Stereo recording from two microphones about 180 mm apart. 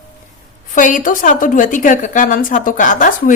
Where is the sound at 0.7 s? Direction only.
45° left (ahead or behind).